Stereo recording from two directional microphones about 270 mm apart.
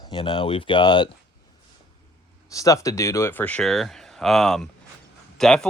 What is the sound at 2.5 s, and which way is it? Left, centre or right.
Speech, centre.